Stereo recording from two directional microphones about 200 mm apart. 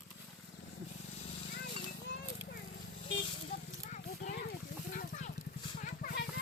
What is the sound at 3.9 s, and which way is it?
Horse, 40° left (ahead or behind).